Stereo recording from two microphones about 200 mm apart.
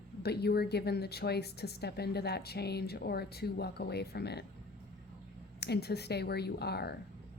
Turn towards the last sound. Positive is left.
turn(degrees=55)  # may be behind; listen again after turning